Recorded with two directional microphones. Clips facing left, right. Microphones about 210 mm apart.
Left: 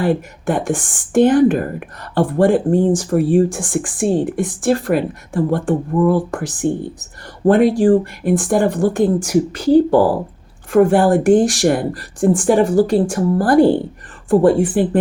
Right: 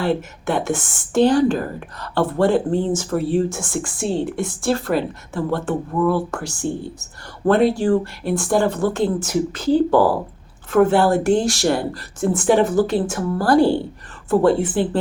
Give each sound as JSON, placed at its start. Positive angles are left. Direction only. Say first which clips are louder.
{"t": 0.0, "sound": "speech", "louder": "left 3 dB", "side_deg": 15}